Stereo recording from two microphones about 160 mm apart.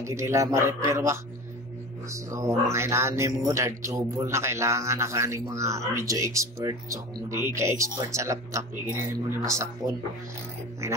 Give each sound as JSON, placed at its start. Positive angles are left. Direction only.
{"t": 0.0, "sound": "speech", "side_deg": -20}